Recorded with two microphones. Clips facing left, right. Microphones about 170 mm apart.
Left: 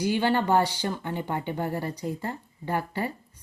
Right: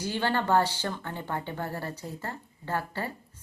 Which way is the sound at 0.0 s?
15° left (ahead or behind).